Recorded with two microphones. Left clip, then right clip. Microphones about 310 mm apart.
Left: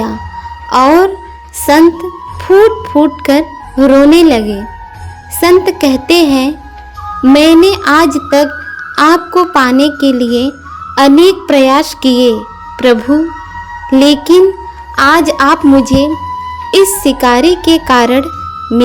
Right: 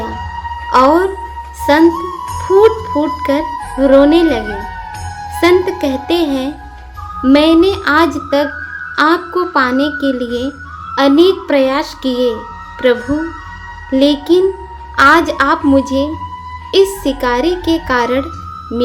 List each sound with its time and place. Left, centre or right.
0.7 s music: left
1.7 s a woman's voice: left